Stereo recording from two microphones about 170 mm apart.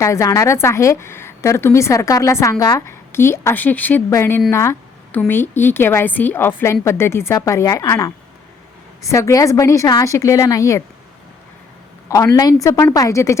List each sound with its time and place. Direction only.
0.0 s a woman's voice: 20° left (ahead or behind)
4.5 s a sound: 15° left (ahead or behind)
5.3 s a woman's voice: 15° left (ahead or behind)
12.0 s a woman's voice: 20° left (ahead or behind)